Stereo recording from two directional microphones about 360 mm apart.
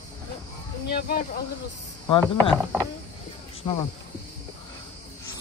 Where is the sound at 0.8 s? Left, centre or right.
Left.